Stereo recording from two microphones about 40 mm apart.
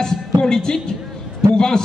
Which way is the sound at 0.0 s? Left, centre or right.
Centre.